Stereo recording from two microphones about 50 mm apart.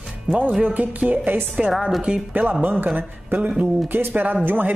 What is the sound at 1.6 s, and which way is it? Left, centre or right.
Speech, right.